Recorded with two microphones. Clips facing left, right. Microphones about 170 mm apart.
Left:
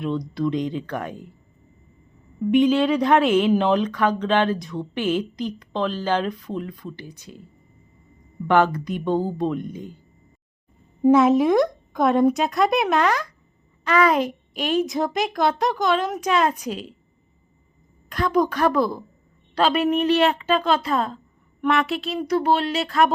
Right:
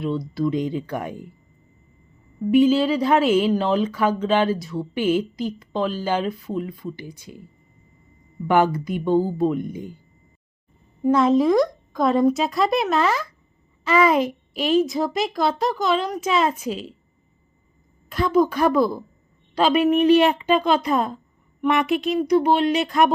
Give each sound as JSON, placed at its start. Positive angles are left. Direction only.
{"t": 0.3, "sound": "speech", "side_deg": -5}
{"t": 2.5, "sound": "a child's voice", "side_deg": -5}
{"t": 8.4, "sound": "speech", "side_deg": -10}
{"t": 11.1, "sound": "a child's voice", "side_deg": 5}
{"t": 18.3, "sound": "speech", "side_deg": -10}